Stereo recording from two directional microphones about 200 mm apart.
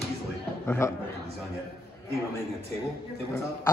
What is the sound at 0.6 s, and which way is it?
Speech, 10° left (ahead or behind).